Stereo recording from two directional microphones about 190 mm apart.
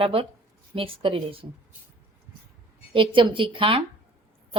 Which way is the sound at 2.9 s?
25° right (ahead or behind).